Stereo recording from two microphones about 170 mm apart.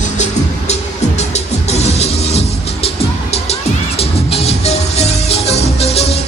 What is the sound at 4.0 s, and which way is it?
Music, 35° left (ahead or behind).